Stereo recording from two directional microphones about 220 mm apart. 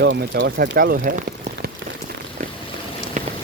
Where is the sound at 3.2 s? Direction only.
30° right (ahead or behind).